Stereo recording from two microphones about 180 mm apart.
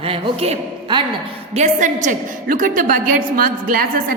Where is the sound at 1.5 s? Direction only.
40° right (ahead or behind).